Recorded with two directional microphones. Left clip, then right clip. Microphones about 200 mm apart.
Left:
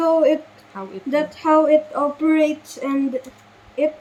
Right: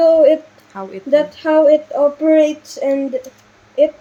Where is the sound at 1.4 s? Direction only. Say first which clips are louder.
Right 2 dB; 25° right (ahead or behind).